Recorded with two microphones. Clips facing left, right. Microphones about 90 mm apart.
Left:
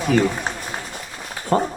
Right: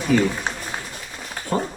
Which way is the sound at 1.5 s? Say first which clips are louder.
Left 5 dB; 45° left (ahead or behind).